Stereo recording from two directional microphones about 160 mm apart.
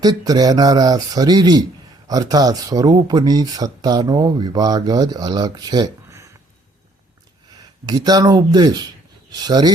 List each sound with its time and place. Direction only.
0.0 s speech: 25° right (ahead or behind)
7.5 s speech: 25° right (ahead or behind)